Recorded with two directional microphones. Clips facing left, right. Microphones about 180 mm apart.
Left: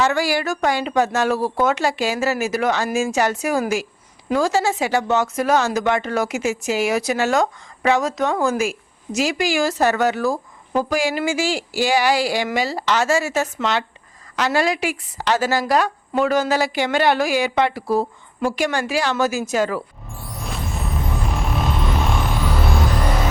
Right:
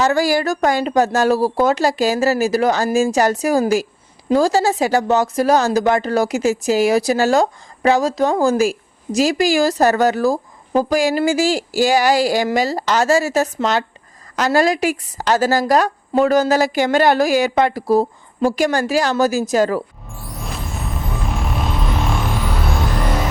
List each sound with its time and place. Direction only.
0.0 s speech: 40° right (ahead or behind)
20.1 s music: centre (ahead or behind)